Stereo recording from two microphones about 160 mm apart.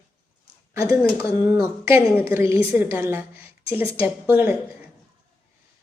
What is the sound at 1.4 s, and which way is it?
A woman's voice, 15° right (ahead or behind).